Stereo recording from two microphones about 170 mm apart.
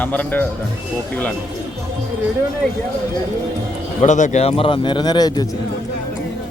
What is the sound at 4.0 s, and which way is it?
Speech, 45° left (ahead or behind).